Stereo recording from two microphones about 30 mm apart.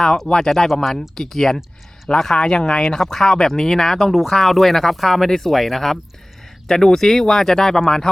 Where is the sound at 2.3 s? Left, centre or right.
Left.